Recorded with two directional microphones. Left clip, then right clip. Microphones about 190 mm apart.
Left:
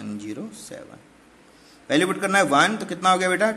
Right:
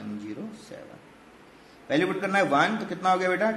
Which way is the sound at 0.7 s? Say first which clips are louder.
Left 3 dB; 45° left (ahead or behind).